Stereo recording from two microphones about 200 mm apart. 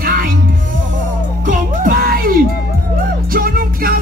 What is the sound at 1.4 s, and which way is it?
Music, 45° right (ahead or behind).